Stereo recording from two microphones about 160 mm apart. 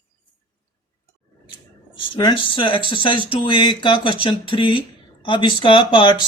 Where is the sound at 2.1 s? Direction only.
30° left (ahead or behind).